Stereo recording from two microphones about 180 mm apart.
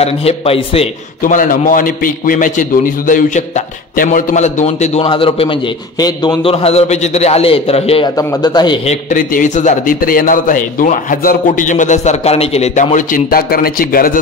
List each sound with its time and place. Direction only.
0.0 s a man's voice: 35° left (ahead or behind)
1.2 s a man's voice: 50° left (ahead or behind)
8.2 s a man's voice: 20° left (ahead or behind)
8.8 s a man's voice: 45° left (ahead or behind)